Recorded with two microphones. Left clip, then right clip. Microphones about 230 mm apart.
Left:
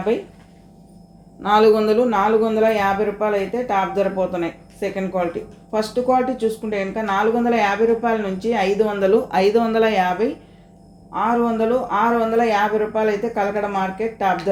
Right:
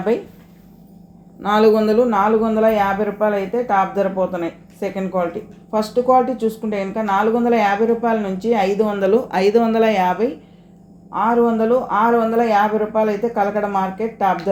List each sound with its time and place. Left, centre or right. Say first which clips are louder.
1.4 s speech: even; right